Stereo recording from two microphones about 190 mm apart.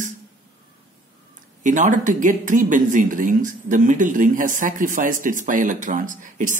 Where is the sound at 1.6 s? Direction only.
40° right (ahead or behind).